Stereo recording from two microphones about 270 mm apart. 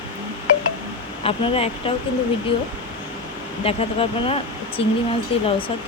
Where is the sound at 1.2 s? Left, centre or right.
Centre.